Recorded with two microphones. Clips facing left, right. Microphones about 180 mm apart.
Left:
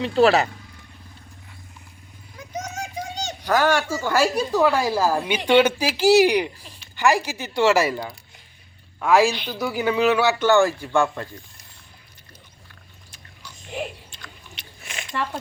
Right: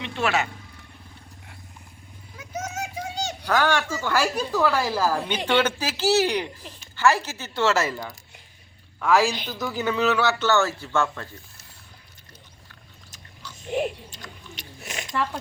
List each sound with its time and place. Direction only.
0.0 s speech: 35° left (ahead or behind)
2.4 s children playing: 5° right (ahead or behind)
3.4 s a man's voice: 10° left (ahead or behind)
14.1 s chewing: 45° right (ahead or behind)